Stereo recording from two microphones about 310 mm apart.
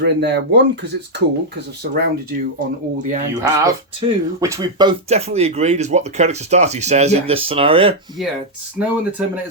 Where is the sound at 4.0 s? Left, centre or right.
Centre.